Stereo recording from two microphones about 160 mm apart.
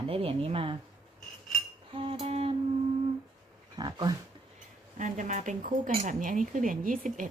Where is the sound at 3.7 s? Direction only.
25° right (ahead or behind).